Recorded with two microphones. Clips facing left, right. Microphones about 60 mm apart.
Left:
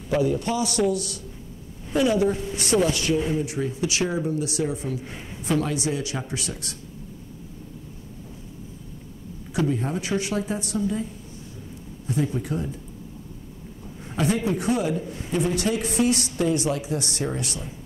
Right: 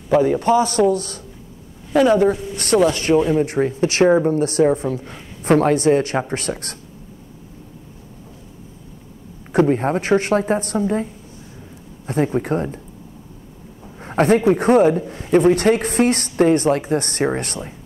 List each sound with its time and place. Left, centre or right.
0.1 s a man's voice: right
0.4 s speech: right
1.9 s a woman's voice: right
9.5 s a woman's voice: right
12.1 s a woman's voice: right
14.0 s a woman's voice: right